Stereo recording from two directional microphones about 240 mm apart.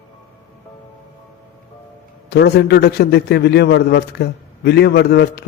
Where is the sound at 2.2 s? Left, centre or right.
Left.